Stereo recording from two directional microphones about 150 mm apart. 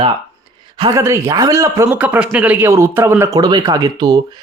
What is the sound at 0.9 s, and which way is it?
Speech, 20° right (ahead or behind).